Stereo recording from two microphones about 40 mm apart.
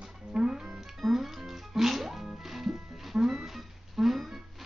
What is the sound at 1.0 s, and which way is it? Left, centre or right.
Music, centre.